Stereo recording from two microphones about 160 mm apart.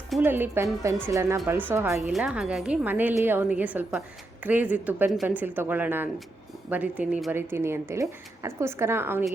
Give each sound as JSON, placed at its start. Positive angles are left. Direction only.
{"t": 0.2, "sound": "a woman's voice", "side_deg": -10}